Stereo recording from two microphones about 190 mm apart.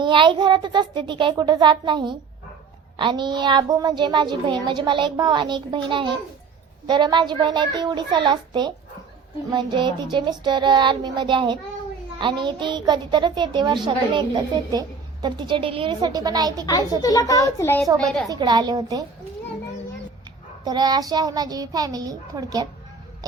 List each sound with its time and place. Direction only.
0.0 s a child's voice: 25° right (ahead or behind)
17.0 s a child's voice: 20° left (ahead or behind)
18.3 s a child's voice: 20° right (ahead or behind)
20.7 s a child's voice: 20° right (ahead or behind)